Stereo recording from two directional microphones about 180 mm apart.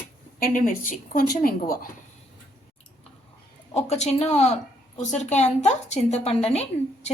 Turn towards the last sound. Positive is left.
turn(degrees=35)  # may be behind; listen again after turning